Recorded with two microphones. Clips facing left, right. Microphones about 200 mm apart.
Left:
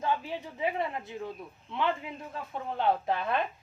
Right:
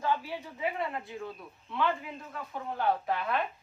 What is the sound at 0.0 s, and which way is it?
A woman's voice, 20° left (ahead or behind).